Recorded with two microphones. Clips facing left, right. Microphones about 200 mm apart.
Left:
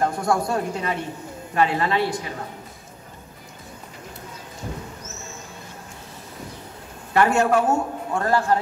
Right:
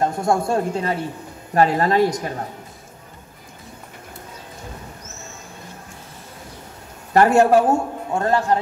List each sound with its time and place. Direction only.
0.0 s a man's voice: 25° right (ahead or behind)
1.5 s speech: 40° right (ahead or behind)
7.2 s a man's voice: 35° right (ahead or behind); by 8.5 s 20° right (ahead or behind)